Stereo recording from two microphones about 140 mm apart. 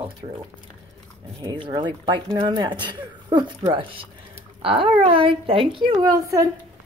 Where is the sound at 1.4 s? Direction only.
35° right (ahead or behind).